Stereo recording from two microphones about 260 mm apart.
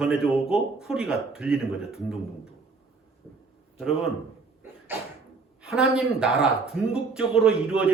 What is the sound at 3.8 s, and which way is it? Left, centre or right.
Speech, centre.